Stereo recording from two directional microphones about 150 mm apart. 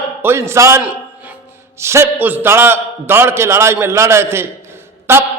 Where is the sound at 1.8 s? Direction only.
20° right (ahead or behind).